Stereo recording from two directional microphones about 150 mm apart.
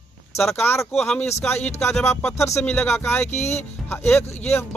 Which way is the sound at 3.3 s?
45° left (ahead or behind).